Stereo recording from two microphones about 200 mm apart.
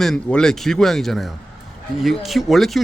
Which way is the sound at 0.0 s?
5° left (ahead or behind).